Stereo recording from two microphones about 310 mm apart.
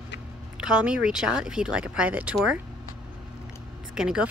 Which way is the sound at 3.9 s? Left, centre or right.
Centre.